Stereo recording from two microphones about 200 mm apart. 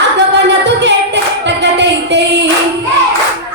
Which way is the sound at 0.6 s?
60° right (ahead or behind).